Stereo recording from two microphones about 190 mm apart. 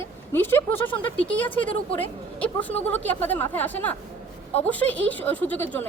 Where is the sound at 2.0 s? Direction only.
10° left (ahead or behind).